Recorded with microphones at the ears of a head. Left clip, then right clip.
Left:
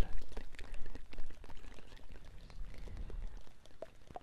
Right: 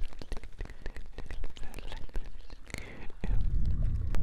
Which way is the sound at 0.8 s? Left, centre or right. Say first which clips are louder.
Right 8 dB; right.